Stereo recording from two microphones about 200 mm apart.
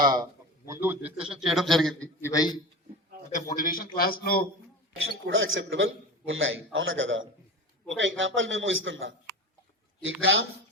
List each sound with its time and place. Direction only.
0.0 s speech: 20° right (ahead or behind); by 2.0 s centre (ahead or behind)
2.2 s a man's voice: 20° left (ahead or behind)
3.3 s a man's voice: 40° left (ahead or behind)
5.2 s a man's voice: 75° right (ahead or behind)